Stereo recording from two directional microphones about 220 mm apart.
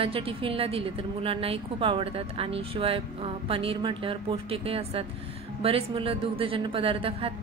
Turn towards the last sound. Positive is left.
turn(degrees=-25)  # may be behind; listen again after turning